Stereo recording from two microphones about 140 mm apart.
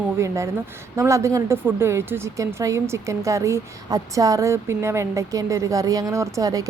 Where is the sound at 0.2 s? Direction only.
20° right (ahead or behind).